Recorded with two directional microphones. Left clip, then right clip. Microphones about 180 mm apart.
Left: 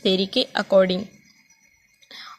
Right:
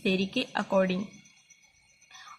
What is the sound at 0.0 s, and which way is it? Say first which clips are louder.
Speech: left 8 dB; 40° left (ahead or behind).